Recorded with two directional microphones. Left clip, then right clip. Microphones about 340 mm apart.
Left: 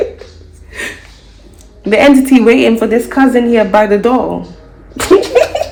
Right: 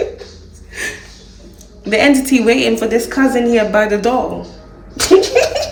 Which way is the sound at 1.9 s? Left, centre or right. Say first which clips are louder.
Left 5 dB; centre.